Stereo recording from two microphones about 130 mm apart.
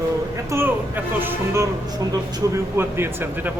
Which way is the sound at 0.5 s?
15° right (ahead or behind).